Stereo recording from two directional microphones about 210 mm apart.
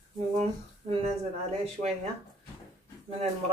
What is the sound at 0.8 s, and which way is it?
Speech, 30° right (ahead or behind).